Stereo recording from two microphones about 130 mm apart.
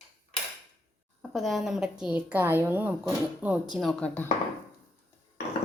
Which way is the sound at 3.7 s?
Centre (ahead or behind).